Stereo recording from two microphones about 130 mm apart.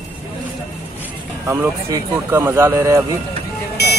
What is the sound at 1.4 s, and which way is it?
Speech, 20° right (ahead or behind).